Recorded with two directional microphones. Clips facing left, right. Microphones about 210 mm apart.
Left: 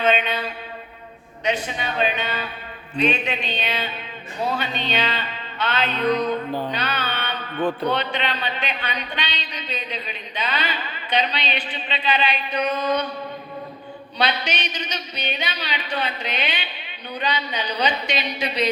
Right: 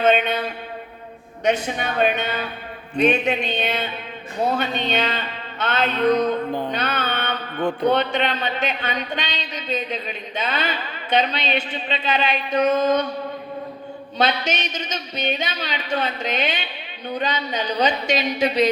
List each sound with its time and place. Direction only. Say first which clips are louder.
0.0 s a sound: right 3 dB; 45° right (ahead or behind)
1.6 s a man's voice: right 3 dB; 50° right (ahead or behind)
6.7 s music: right 2 dB; 50° right (ahead or behind)
7.6 s a man's voice: right 3 dB; 15° right (ahead or behind)
7.9 s a man's voice: right 4 dB; 50° right (ahead or behind)
14.2 s a man's voice: right 3 dB; 45° right (ahead or behind)